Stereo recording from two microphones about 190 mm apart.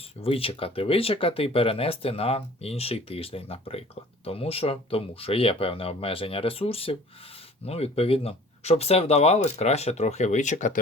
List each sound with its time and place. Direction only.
0.2 s speech: 30° left (ahead or behind)